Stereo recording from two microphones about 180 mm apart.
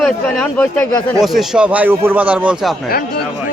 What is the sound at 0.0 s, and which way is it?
A man's voice, centre (ahead or behind).